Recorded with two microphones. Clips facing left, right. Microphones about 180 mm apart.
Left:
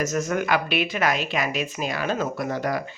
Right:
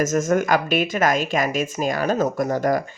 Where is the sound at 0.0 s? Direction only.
45° right (ahead or behind).